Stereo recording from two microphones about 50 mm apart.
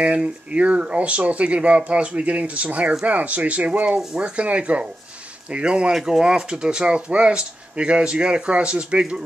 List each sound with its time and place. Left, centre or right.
0.0 s speech: right